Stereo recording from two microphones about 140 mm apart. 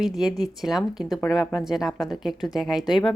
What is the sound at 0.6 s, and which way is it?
Speech, 5° right (ahead or behind).